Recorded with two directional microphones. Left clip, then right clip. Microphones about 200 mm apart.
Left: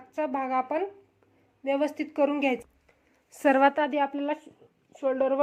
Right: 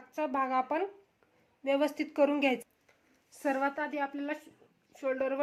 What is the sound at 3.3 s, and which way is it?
A woman's voice, 50° left (ahead or behind).